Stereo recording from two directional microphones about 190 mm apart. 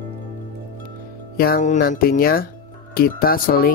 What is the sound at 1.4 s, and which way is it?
Speech, 50° left (ahead or behind).